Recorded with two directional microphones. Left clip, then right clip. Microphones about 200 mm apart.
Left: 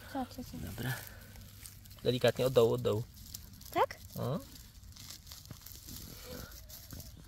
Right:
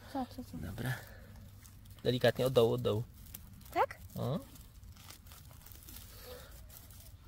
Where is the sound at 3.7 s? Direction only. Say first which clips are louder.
Left 1 dB; 15° left (ahead or behind).